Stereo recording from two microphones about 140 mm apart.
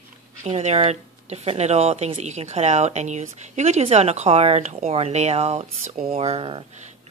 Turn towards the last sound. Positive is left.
turn(degrees=-40)  # may be behind; listen again after turning